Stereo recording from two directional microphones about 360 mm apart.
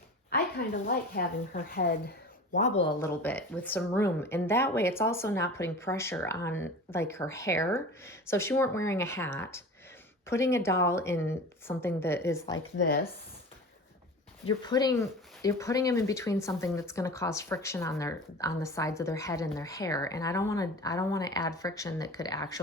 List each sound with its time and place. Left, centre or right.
0.3 s speech: left
3.0 s speech: centre
12.5 s speech: left
14.4 s speech: centre